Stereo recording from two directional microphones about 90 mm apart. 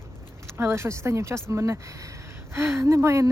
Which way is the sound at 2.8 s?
30° right (ahead or behind).